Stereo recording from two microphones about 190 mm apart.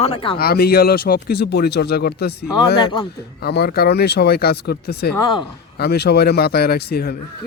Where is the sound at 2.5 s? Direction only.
25° left (ahead or behind).